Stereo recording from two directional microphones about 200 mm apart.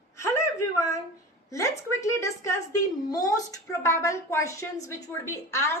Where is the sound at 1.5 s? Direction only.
15° left (ahead or behind).